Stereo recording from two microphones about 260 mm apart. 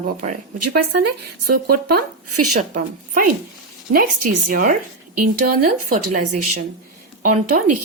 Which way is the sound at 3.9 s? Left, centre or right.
Right.